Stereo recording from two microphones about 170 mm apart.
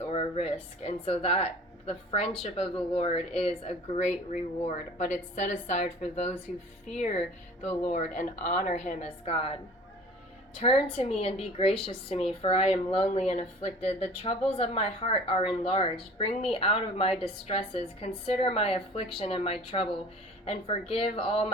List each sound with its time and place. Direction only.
0.1 s speech: 35° left (ahead or behind)
10.9 s speech: 35° left (ahead or behind)